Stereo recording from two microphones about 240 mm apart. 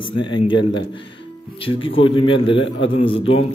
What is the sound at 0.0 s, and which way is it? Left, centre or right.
A man's voice, centre.